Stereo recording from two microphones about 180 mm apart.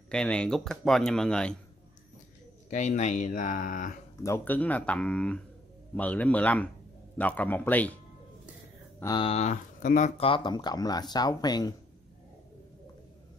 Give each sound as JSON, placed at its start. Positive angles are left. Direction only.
{"t": 0.1, "sound": "speech", "side_deg": 5}
{"t": 2.7, "sound": "speech", "side_deg": 40}
{"t": 4.2, "sound": "speech", "side_deg": 15}
{"t": 9.0, "sound": "speech", "side_deg": 25}